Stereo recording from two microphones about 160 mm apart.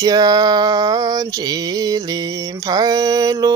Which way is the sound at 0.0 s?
25° right (ahead or behind).